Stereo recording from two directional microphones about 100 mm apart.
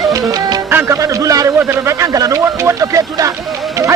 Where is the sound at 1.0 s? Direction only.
35° right (ahead or behind).